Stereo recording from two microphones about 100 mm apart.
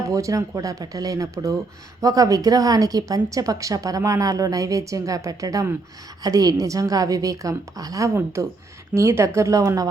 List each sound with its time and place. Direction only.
0.1 s a woman's voice: 35° right (ahead or behind)